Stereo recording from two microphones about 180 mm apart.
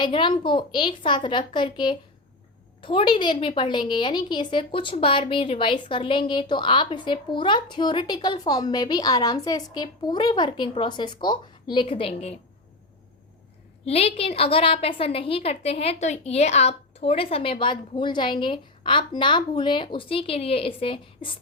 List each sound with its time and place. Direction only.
0.0 s a woman's voice: 25° left (ahead or behind)
13.8 s a woman's voice: 35° left (ahead or behind)